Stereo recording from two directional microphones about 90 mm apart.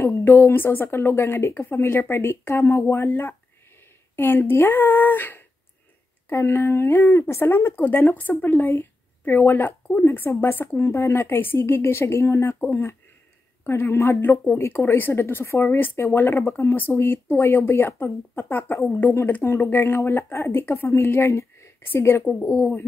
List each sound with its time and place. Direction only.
0.0 s speech: 25° left (ahead or behind)
22.2 s speech: 10° left (ahead or behind)
22.5 s speech: 25° left (ahead or behind)